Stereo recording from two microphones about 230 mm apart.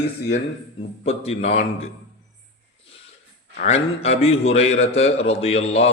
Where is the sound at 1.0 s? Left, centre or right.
Left.